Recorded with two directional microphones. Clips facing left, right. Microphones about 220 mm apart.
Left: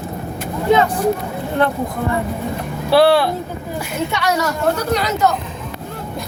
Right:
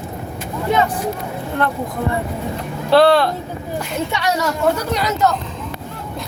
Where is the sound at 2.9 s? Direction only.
10° left (ahead or behind).